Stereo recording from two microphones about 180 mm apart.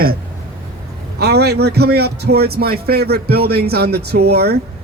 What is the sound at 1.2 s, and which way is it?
Speech, 65° right (ahead or behind).